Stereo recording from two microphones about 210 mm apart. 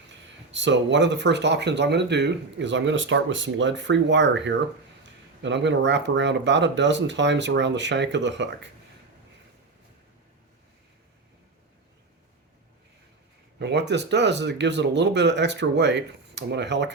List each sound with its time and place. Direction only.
0.5 s speech: 60° right (ahead or behind)
13.6 s speech: 55° right (ahead or behind)